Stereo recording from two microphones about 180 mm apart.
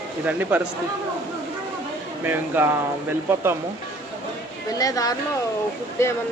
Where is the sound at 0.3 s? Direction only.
10° right (ahead or behind).